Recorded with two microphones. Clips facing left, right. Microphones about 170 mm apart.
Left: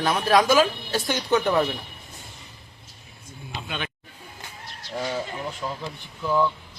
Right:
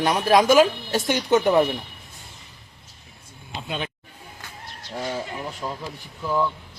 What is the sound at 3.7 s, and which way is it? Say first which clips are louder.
Speech: right 4 dB; 30° right (ahead or behind).